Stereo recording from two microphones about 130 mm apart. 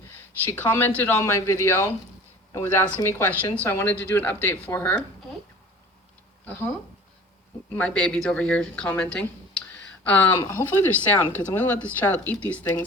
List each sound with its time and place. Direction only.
0.4 s speech: 15° left (ahead or behind)
6.4 s speech: 15° left (ahead or behind)
7.7 s speech: 10° left (ahead or behind)
9.1 s a sound: 10° left (ahead or behind)
10.5 s speech: 15° left (ahead or behind)